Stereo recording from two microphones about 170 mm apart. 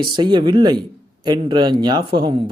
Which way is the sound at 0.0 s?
25° right (ahead or behind).